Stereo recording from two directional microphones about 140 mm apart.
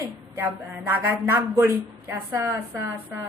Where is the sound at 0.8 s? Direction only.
15° right (ahead or behind).